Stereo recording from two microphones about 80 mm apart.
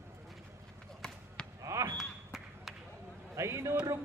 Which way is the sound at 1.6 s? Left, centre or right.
Right.